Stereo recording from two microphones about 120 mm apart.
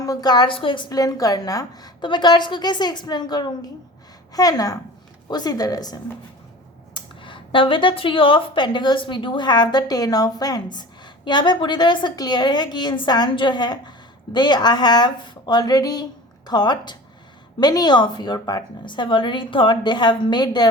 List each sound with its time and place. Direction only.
0.0 s speech: 30° left (ahead or behind)
6.9 s speech: 45° left (ahead or behind)